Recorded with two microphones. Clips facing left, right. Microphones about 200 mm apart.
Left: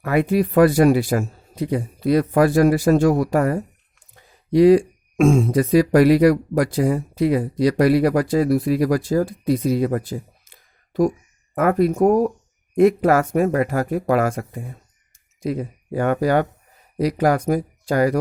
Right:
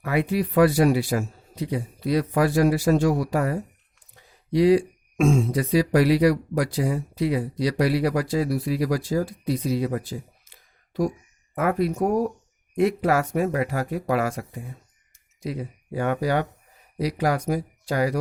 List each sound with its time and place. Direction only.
0.0 s speech: 50° left (ahead or behind)
11.5 s speech: 50° left (ahead or behind)